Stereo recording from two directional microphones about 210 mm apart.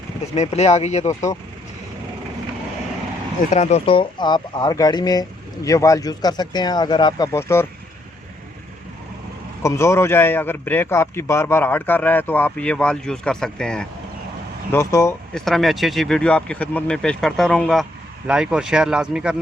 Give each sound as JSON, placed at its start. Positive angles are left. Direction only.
{"t": 0.3, "sound": "speech", "side_deg": 30}
{"t": 1.0, "sound": "speech", "side_deg": 15}
{"t": 3.5, "sound": "speech", "side_deg": 30}
{"t": 9.6, "sound": "speech", "side_deg": 15}
{"t": 15.4, "sound": "speech", "side_deg": 0}